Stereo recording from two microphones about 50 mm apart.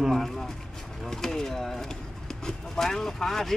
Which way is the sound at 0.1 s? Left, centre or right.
Centre.